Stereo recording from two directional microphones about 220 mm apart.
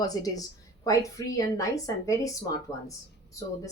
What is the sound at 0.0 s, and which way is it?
Speech, 15° left (ahead or behind).